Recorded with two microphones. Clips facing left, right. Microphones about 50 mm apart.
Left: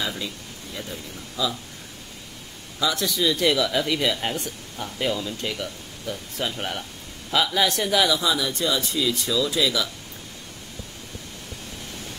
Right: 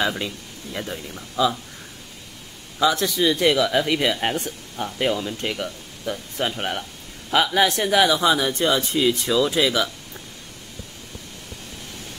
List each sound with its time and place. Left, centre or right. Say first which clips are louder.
0.7 s speech: right 5 dB; right
2.8 s speech: right 4 dB; right